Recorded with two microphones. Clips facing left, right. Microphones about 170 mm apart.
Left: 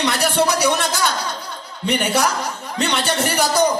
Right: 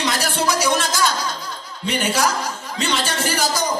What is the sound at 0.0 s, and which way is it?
A man's voice, 65° left (ahead or behind).